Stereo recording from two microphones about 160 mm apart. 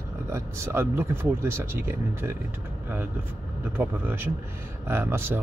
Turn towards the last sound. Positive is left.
turn(degrees=-15)  # may be behind; listen again after turning